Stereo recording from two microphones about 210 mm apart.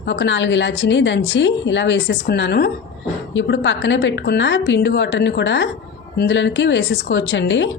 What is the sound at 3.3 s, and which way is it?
Speech, 60° left (ahead or behind).